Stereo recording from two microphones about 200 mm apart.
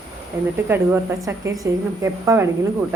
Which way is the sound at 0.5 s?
10° right (ahead or behind).